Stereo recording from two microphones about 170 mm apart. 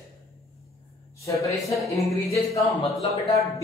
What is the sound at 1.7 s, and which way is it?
Speech, centre (ahead or behind).